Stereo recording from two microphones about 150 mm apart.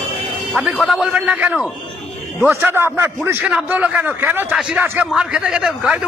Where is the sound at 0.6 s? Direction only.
5° right (ahead or behind).